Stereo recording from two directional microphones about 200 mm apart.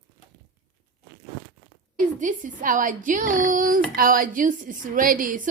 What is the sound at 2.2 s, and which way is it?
A woman's voice, 40° right (ahead or behind).